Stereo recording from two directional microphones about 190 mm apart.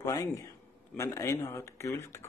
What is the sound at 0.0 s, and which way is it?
A man's voice, 20° left (ahead or behind).